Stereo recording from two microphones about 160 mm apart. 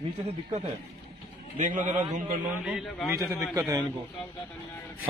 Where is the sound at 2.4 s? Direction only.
5° right (ahead or behind).